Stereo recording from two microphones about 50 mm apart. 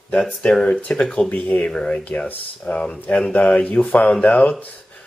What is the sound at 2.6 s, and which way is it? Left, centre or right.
Speech, centre.